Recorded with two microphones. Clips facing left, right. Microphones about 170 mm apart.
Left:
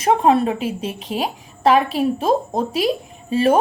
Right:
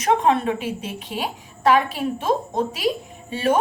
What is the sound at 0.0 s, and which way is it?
A woman's voice, 30° left (ahead or behind).